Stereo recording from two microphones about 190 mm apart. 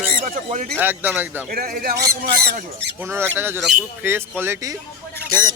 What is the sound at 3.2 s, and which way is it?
Speech, 10° right (ahead or behind).